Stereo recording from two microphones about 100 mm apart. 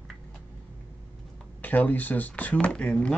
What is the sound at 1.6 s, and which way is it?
Speech, 15° left (ahead or behind).